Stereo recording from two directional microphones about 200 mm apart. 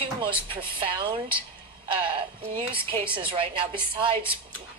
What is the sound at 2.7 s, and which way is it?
A woman's voice, 25° right (ahead or behind).